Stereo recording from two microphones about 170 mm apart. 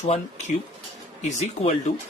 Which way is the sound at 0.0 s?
35° left (ahead or behind).